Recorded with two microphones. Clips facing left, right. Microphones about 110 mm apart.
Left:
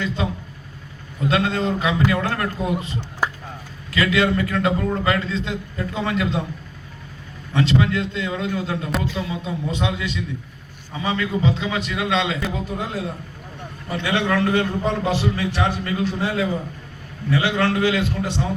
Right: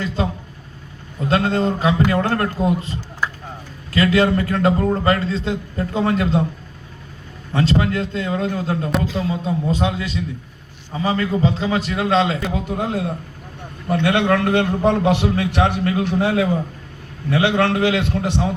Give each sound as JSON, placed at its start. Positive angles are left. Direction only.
{"t": 0.2, "sound": "a man's voice", "side_deg": -35}
{"t": 7.5, "sound": "a man's voice", "side_deg": -40}
{"t": 12.7, "sound": "a man's voice", "side_deg": -55}